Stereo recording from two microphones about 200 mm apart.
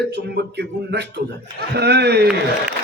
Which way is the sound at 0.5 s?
55° right (ahead or behind).